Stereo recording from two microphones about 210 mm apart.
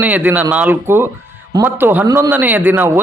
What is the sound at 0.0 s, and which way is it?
A man's voice, 10° right (ahead or behind).